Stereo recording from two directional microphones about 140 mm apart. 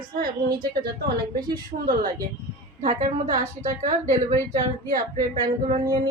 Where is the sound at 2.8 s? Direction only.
60° right (ahead or behind).